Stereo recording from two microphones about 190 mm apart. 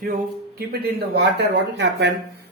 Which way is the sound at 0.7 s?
55° right (ahead or behind).